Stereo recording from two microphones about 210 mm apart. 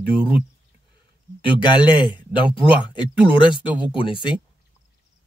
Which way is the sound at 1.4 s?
20° left (ahead or behind).